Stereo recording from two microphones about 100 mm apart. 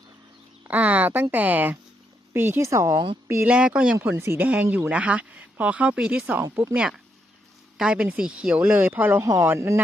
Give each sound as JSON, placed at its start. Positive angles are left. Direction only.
{"t": 0.6, "sound": "speech", "side_deg": -15}
{"t": 3.4, "sound": "speech", "side_deg": -10}
{"t": 4.0, "sound": "speech", "side_deg": -20}
{"t": 6.4, "sound": "speech", "side_deg": -30}
{"t": 6.7, "sound": "speech", "side_deg": -10}
{"t": 9.2, "sound": "speech", "side_deg": -35}